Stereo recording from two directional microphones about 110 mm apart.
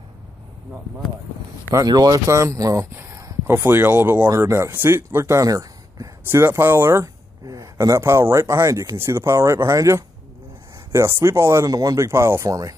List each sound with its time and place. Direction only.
1.8 s speech: 35° right (ahead or behind)